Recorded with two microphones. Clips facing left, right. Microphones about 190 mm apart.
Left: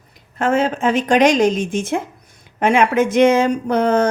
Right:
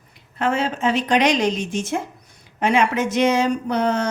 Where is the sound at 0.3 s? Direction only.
50° left (ahead or behind).